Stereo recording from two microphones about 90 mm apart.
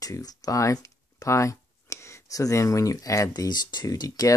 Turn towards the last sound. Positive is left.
turn(degrees=45)  # may be behind; listen again after turning